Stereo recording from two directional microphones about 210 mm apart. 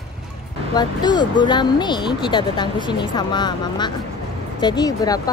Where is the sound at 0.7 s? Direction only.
20° left (ahead or behind).